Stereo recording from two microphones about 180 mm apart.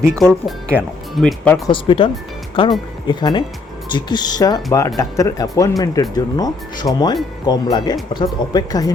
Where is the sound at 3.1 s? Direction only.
25° left (ahead or behind).